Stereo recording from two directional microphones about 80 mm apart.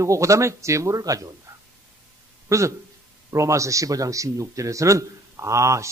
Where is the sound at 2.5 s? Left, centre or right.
Right.